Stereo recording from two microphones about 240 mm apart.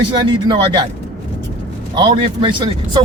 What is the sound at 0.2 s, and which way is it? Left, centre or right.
Speech, centre.